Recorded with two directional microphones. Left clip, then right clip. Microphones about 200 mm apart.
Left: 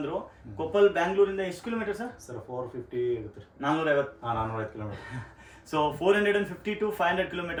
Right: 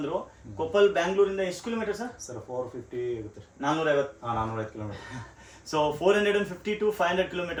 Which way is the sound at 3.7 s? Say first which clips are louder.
Right 1 dB; 15° right (ahead or behind).